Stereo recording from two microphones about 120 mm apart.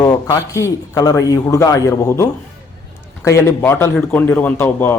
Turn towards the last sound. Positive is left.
turn(degrees=20)  # may be behind; listen again after turning